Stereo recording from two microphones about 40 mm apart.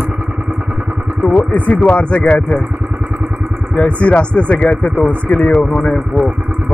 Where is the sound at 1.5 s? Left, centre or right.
Left.